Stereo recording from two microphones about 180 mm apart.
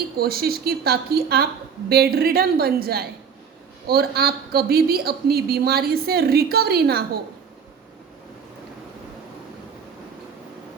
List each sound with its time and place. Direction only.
0.2 s a woman's voice: 60° right (ahead or behind)